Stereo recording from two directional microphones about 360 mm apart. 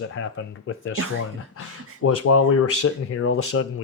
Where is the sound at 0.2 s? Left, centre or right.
Left.